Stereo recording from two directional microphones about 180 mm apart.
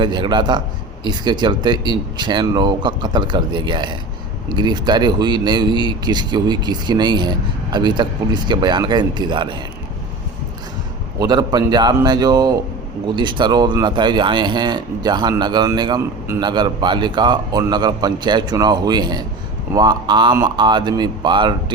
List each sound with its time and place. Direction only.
0.0 s speech: 25° right (ahead or behind)
11.2 s speech: 20° right (ahead or behind)